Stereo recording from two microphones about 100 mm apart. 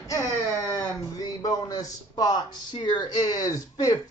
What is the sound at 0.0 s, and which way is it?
Speech, 35° left (ahead or behind).